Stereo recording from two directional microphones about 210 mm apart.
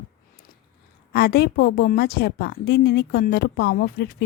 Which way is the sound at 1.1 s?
50° left (ahead or behind).